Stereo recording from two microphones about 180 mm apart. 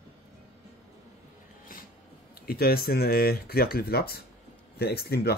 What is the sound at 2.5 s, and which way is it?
Speech, 55° left (ahead or behind).